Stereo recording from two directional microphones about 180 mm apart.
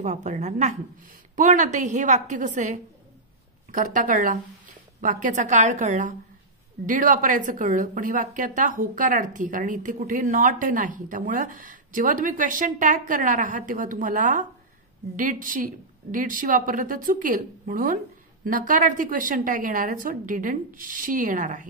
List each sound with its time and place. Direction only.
0.0 s a woman's voice: 40° right (ahead or behind)